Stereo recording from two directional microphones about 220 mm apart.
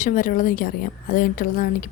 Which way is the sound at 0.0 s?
35° left (ahead or behind).